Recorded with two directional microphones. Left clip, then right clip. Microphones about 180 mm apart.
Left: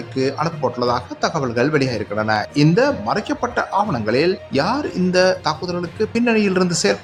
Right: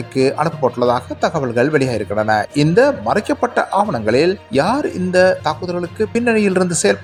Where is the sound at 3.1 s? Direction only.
30° right (ahead or behind).